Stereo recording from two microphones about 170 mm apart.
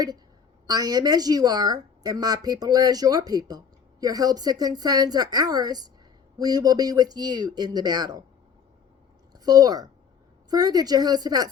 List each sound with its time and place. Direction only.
0.7 s a woman's voice: 20° right (ahead or behind)
9.3 s a woman's voice: 20° right (ahead or behind)